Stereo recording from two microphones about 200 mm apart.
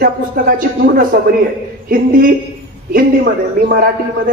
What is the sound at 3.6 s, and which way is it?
Speech, 45° right (ahead or behind).